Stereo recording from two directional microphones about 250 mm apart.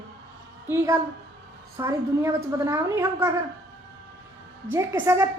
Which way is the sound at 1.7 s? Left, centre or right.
Centre.